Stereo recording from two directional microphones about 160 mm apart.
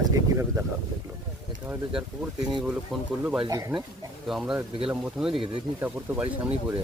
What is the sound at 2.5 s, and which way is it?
Speech, 5° right (ahead or behind).